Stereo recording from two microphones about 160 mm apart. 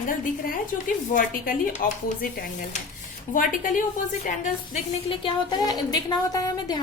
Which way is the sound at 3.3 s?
55° left (ahead or behind).